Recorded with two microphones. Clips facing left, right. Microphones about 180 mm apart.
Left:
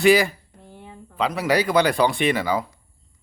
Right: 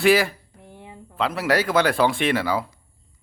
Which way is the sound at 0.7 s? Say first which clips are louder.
Even; 20° right (ahead or behind).